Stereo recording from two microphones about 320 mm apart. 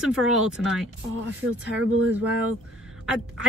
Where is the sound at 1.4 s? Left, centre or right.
Right.